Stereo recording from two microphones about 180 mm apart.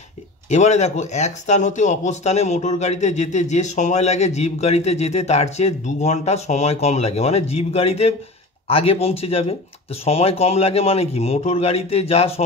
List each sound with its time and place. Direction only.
0.5 s speech: 40° left (ahead or behind)